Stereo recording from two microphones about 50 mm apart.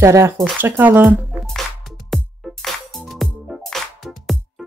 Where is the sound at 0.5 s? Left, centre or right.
Right.